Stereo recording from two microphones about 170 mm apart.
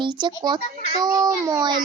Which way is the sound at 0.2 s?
25° right (ahead or behind).